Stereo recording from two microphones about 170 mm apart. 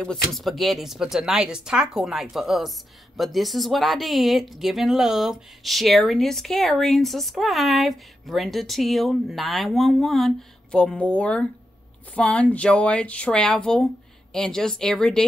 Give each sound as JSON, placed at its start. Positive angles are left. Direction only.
{"t": 0.0, "sound": "speech", "side_deg": 0}